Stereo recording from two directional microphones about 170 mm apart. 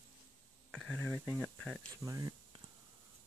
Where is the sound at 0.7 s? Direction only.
5° left (ahead or behind).